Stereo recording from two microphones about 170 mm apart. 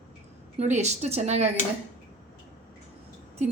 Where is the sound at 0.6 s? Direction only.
40° right (ahead or behind).